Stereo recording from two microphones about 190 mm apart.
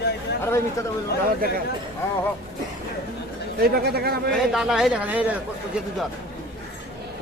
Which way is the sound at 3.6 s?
55° right (ahead or behind).